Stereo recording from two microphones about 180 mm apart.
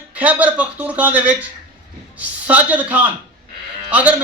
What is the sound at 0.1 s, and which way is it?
A man's voice, 10° right (ahead or behind).